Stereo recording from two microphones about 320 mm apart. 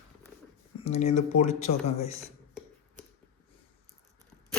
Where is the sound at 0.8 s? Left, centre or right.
Centre.